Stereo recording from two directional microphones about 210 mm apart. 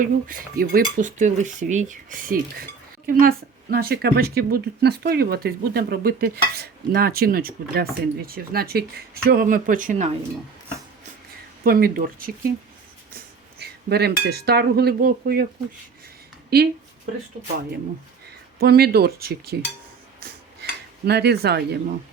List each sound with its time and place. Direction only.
0.0 s speech: 40° right (ahead or behind)
11.6 s speech: 45° right (ahead or behind)
16.5 s speech: 50° right (ahead or behind)
17.3 s speech: 25° right (ahead or behind)
18.6 s speech: 50° right (ahead or behind)
20.2 s a sound: 50° right (ahead or behind)